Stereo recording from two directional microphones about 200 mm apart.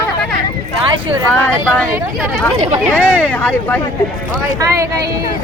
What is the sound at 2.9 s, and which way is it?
Speech, 10° left (ahead or behind).